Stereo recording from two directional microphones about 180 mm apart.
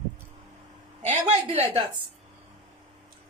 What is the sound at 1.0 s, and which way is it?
Speech, 40° right (ahead or behind).